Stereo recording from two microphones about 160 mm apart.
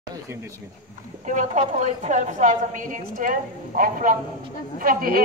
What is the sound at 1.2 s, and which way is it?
A woman's voice, 50° right (ahead or behind).